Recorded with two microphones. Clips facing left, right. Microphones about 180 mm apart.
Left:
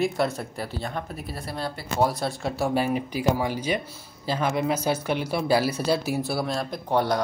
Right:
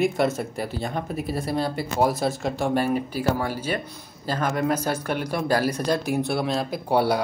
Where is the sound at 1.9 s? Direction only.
Centre (ahead or behind).